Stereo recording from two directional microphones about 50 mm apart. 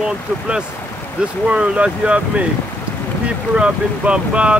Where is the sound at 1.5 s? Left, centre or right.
Right.